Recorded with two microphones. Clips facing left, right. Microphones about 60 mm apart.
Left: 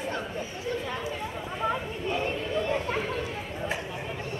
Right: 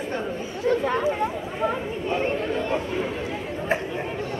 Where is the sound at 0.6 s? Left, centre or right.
Right.